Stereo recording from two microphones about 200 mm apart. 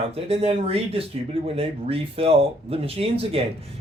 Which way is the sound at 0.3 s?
30° right (ahead or behind).